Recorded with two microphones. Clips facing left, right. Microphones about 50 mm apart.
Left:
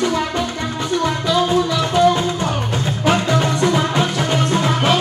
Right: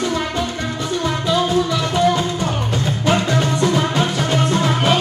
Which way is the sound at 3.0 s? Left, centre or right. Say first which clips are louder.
Left 2 dB; left.